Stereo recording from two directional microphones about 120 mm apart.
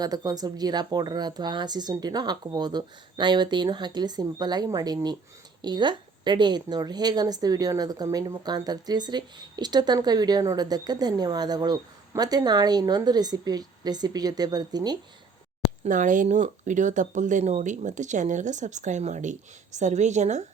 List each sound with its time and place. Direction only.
0.0 s a woman's voice: 35° right (ahead or behind)
15.8 s speech: 90° right